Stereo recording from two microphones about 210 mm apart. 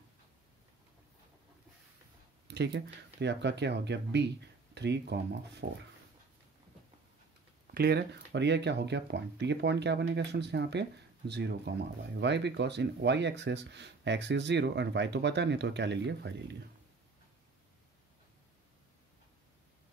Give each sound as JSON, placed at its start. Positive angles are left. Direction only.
{"t": 2.4, "sound": "speech", "side_deg": -55}
{"t": 7.6, "sound": "speech", "side_deg": -50}